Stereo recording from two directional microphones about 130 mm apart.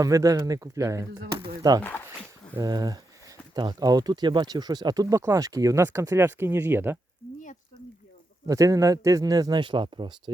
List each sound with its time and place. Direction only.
0.0 s speech: 25° right (ahead or behind)
8.4 s speech: 25° right (ahead or behind)